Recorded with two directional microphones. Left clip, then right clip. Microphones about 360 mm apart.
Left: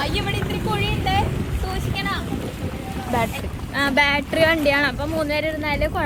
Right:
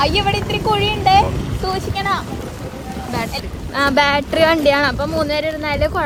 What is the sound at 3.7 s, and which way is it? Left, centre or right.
Speech, centre.